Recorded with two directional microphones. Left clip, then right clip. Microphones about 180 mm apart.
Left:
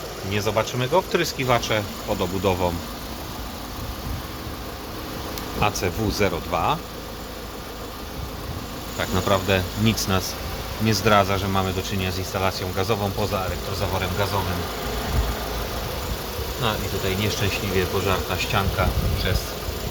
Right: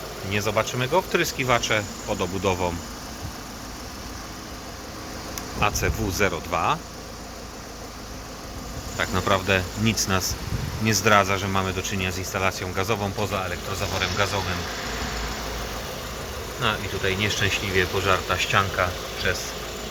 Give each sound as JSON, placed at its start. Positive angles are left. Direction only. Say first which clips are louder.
{"t": 0.3, "sound": "speech", "louder": "left 1 dB", "side_deg": 0}
{"t": 5.5, "sound": "speech", "louder": "left 1 dB", "side_deg": 0}
{"t": 9.0, "sound": "speech", "louder": "left 1 dB", "side_deg": 0}
{"t": 16.6, "sound": "speech", "louder": "right 1 dB", "side_deg": 5}